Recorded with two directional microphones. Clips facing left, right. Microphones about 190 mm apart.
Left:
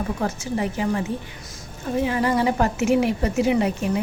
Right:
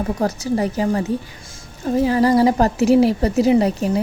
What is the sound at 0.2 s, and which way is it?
A woman's voice, 35° right (ahead or behind).